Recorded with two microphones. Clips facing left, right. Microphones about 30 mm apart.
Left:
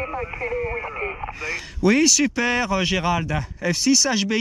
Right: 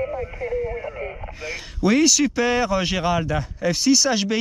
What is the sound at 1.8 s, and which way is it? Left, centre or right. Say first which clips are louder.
Speech: even; centre.